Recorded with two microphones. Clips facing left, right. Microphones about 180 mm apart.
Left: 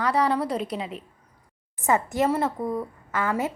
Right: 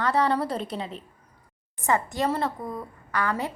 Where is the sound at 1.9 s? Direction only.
20° left (ahead or behind).